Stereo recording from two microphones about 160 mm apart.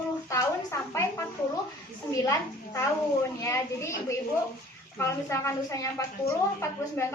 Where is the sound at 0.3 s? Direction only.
20° left (ahead or behind).